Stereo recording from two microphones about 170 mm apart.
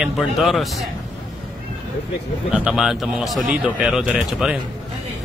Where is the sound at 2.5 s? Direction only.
5° right (ahead or behind).